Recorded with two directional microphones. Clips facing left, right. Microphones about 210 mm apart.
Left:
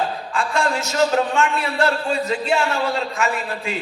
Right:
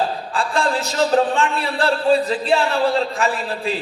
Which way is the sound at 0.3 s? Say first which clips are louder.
Right 1 dB; 35° right (ahead or behind).